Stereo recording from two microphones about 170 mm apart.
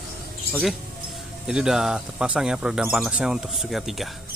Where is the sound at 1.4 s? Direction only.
5° right (ahead or behind).